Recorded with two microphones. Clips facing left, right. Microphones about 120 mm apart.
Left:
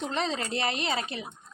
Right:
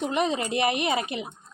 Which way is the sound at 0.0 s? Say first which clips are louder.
Right 5 dB; 15° right (ahead or behind).